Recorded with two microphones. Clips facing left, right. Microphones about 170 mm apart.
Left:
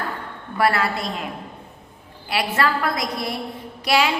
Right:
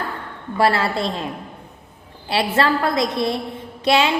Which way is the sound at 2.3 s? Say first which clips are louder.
Right 3 dB; 25° right (ahead or behind).